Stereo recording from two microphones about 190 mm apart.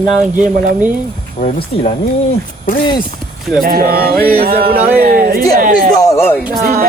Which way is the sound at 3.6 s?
50° right (ahead or behind).